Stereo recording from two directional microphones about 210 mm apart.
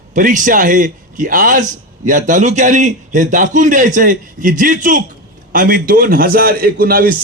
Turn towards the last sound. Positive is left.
turn(degrees=-45)  # may be behind; listen again after turning